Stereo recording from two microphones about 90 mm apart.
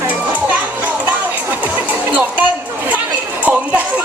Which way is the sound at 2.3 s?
15° right (ahead or behind).